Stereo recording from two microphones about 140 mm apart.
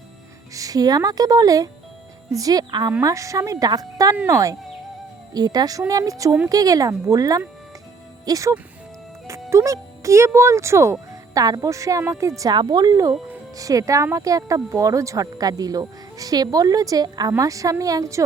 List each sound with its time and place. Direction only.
0.5 s speech: 25° right (ahead or behind)
12.4 s speech: 30° right (ahead or behind)